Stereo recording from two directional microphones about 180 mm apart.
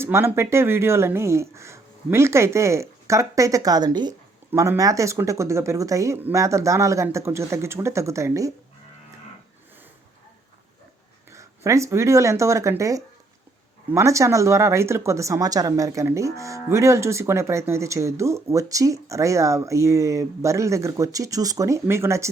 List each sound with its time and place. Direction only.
0.0 s speech: 15° right (ahead or behind)
11.3 s speech: 15° right (ahead or behind)